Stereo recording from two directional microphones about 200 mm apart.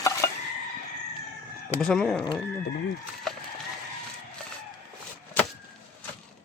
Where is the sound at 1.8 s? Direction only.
5° left (ahead or behind).